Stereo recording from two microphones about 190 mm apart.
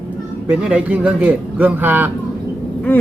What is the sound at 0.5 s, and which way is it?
A man's voice, 5° right (ahead or behind).